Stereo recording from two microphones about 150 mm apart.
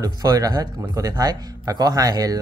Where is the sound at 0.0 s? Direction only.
25° right (ahead or behind).